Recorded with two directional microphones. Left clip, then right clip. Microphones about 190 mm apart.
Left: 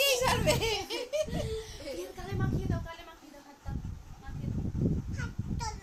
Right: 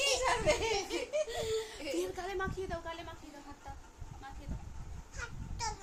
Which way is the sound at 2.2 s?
50° right (ahead or behind).